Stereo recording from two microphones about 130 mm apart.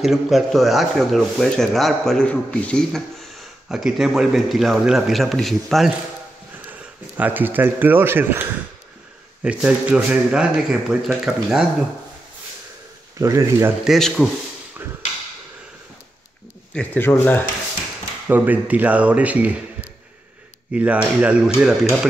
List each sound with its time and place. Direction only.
0.0 s speech: centre (ahead or behind)
6.7 s speech: 15° right (ahead or behind)
13.2 s speech: 25° right (ahead or behind)
13.8 s speech: centre (ahead or behind)
16.7 s speech: 15° left (ahead or behind)
18.3 s speech: 15° right (ahead or behind)
20.7 s speech: 10° right (ahead or behind)